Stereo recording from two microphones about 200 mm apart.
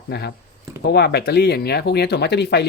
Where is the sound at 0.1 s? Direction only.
55° left (ahead or behind).